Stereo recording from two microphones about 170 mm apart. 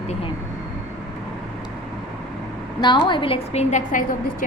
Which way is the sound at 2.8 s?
25° left (ahead or behind).